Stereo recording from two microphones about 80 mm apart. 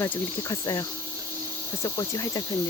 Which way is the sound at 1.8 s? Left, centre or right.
Left.